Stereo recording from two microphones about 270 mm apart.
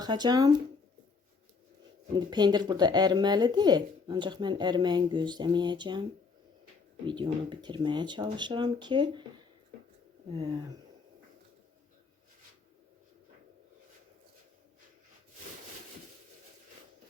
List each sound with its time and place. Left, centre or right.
0.0 s speech: centre
2.1 s speech: centre
7.1 s speech: centre
10.3 s speech: centre